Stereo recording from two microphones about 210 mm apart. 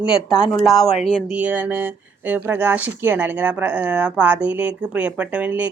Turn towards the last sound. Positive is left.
turn(degrees=-5)  # may be behind; listen again after turning